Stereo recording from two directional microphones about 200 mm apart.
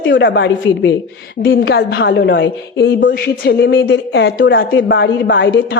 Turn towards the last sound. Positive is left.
turn(degrees=65)  # may be behind; listen again after turning